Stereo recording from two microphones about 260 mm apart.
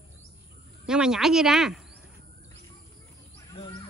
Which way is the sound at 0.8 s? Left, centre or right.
Centre.